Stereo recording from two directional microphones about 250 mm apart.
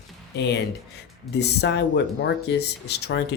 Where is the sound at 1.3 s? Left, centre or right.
Left.